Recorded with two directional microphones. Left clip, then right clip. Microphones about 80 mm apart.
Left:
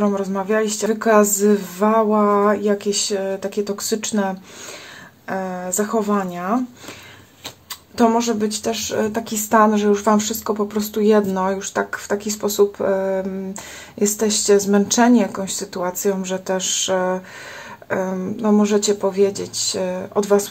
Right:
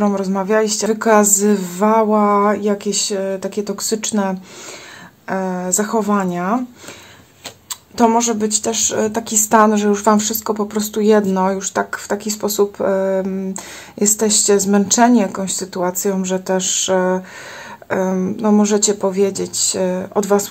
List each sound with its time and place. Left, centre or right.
0.0 s speech: right
8.0 s speech: right